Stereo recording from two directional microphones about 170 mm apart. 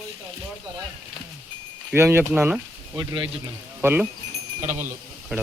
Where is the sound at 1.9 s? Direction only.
15° right (ahead or behind).